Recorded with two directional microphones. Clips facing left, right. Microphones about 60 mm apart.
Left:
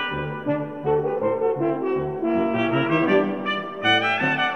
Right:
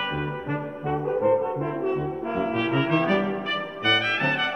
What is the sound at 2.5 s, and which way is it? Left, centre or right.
Brass instrument, centre.